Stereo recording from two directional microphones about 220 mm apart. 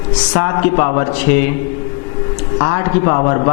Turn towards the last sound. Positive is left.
turn(degrees=25)  # may be behind; listen again after turning